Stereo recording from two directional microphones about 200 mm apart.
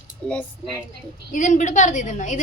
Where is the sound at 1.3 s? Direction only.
40° left (ahead or behind).